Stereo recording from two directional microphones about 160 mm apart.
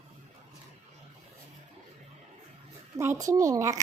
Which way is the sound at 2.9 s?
15° right (ahead or behind).